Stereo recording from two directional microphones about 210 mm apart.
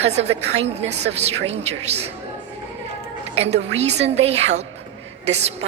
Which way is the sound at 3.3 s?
30° right (ahead or behind).